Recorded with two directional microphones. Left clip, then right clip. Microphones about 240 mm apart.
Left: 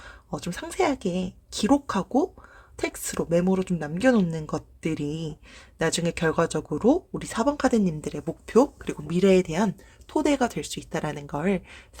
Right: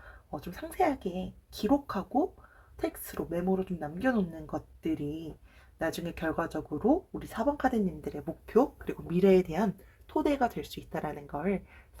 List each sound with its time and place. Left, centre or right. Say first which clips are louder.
0.0 s speech: left 6 dB; left